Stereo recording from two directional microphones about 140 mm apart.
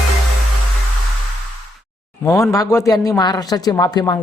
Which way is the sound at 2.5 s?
20° left (ahead or behind).